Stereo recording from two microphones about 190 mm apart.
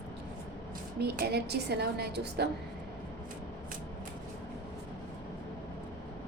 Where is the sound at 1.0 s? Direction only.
55° right (ahead or behind).